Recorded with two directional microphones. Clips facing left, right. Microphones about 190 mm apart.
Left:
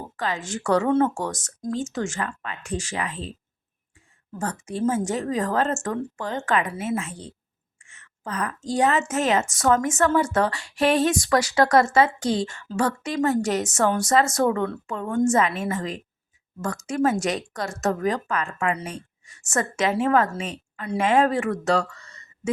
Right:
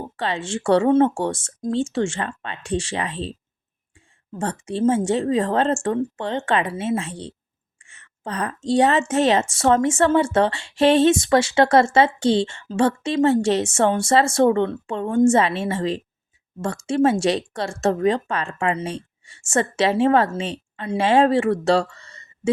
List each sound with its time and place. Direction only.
0.2 s a woman's voice: 30° right (ahead or behind)
4.4 s a woman's voice: 30° right (ahead or behind)